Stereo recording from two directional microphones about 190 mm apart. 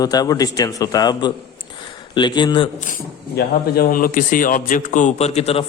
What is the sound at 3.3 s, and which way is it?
A man's voice, 50° left (ahead or behind).